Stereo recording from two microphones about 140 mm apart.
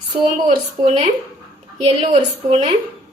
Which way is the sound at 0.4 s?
55° right (ahead or behind).